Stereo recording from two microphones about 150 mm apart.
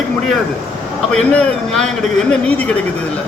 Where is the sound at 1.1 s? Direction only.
5° left (ahead or behind).